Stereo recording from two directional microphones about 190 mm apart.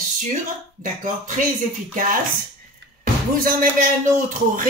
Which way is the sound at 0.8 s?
40° right (ahead or behind).